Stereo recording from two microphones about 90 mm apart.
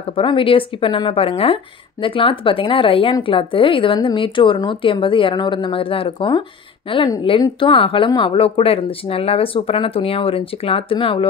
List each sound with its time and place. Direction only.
0.1 s a woman's voice: 75° left (ahead or behind); by 6.4 s 60° left (ahead or behind)
7.2 s speech: 70° left (ahead or behind)